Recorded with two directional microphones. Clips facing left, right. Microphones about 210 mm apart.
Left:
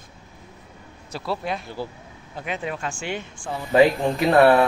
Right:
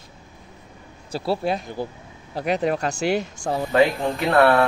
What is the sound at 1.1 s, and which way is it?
Speech, 30° right (ahead or behind).